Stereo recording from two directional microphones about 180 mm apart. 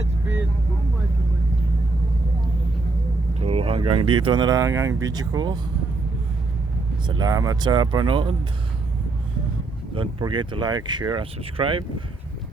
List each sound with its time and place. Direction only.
3.4 s speech: 35° right (ahead or behind)
7.1 s speech: 20° right (ahead or behind)
9.9 s speech: 25° right (ahead or behind)